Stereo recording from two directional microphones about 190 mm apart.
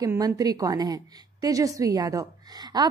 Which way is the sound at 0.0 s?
20° right (ahead or behind).